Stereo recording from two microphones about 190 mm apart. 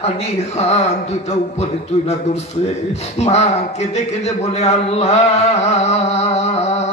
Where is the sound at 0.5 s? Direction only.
35° left (ahead or behind).